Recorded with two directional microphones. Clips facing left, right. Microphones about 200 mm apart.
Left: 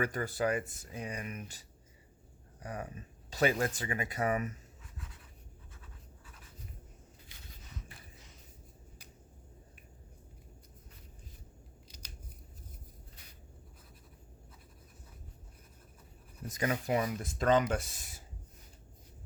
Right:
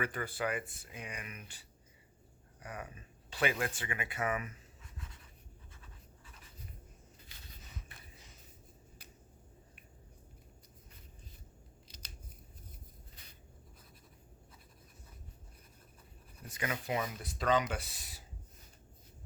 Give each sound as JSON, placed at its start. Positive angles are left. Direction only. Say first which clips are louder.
{"t": 0.0, "sound": "speech", "louder": "left 4 dB", "side_deg": 40}
{"t": 4.9, "sound": "writing", "louder": "left 1 dB", "side_deg": 5}
{"t": 16.5, "sound": "speech", "louder": "left 5 dB", "side_deg": 40}